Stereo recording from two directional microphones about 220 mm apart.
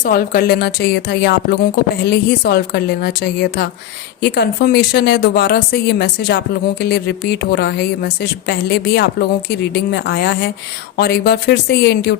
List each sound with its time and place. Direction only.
0.0 s speech: 40° left (ahead or behind)